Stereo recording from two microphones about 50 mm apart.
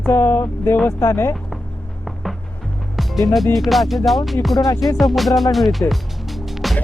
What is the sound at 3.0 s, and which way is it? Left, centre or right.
Speech, centre.